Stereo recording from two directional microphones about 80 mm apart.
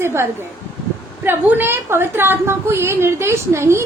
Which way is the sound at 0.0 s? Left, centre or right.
Right.